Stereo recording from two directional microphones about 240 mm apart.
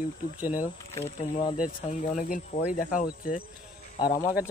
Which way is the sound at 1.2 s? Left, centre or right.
Centre.